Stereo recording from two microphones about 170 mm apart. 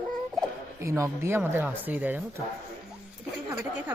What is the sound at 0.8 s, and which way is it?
Speech, 15° right (ahead or behind).